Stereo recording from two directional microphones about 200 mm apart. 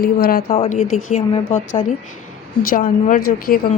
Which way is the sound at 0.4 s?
30° left (ahead or behind).